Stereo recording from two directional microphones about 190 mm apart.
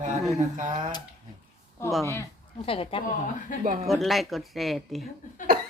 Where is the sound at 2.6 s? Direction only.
30° left (ahead or behind).